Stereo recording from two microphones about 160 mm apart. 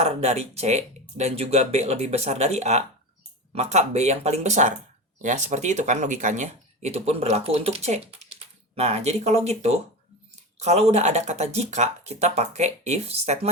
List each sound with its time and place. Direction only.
0.0 s speech: 40° right (ahead or behind)